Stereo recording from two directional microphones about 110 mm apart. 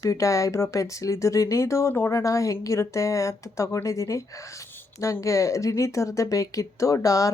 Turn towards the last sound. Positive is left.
turn(degrees=30)  # may be behind; listen again after turning